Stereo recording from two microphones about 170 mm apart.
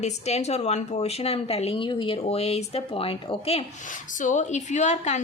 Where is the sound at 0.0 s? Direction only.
40° left (ahead or behind).